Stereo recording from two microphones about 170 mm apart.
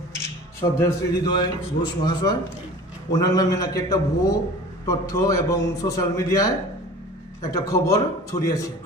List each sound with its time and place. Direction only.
0.6 s a man's voice: 20° left (ahead or behind)